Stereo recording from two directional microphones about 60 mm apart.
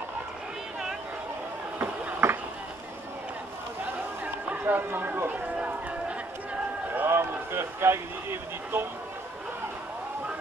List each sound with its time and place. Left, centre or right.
2.2 s a sound: right
4.5 s speech: right
7.1 s speech: right